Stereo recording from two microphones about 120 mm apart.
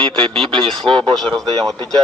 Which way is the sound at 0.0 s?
5° left (ahead or behind).